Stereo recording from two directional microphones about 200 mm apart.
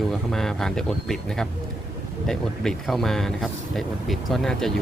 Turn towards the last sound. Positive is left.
turn(degrees=0)  # may be behind; listen again after turning